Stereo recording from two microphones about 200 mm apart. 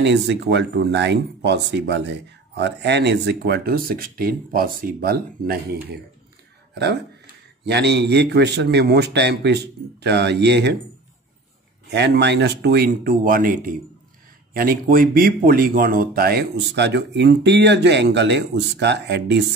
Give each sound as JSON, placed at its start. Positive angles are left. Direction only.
{"t": 0.0, "sound": "speech", "side_deg": -60}
{"t": 7.6, "sound": "speech", "side_deg": -55}
{"t": 11.9, "sound": "speech", "side_deg": -60}